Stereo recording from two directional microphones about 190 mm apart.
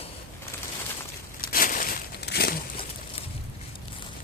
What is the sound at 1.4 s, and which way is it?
Crumpling, 50° left (ahead or behind).